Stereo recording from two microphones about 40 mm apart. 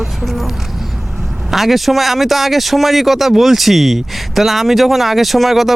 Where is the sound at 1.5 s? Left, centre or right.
Centre.